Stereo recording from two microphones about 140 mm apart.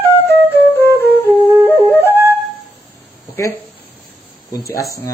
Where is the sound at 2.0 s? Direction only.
15° right (ahead or behind).